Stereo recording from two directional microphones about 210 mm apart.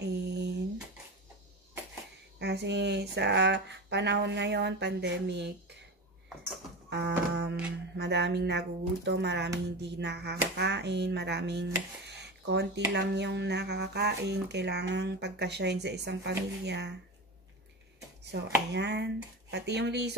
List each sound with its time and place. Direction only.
0.0 s a sound: 50° right (ahead or behind)
2.3 s speech: 55° right (ahead or behind)
6.9 s speech: 55° right (ahead or behind)
18.3 s speech: 50° right (ahead or behind)